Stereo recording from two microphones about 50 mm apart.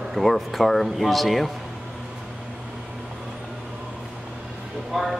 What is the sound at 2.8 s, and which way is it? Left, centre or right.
Vehicle, centre.